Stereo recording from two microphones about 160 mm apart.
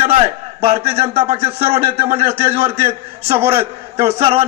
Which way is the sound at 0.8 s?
40° right (ahead or behind).